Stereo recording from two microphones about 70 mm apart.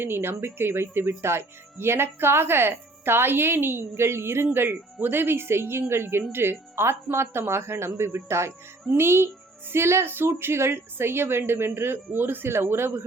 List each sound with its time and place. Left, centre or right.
0.0 s speech: right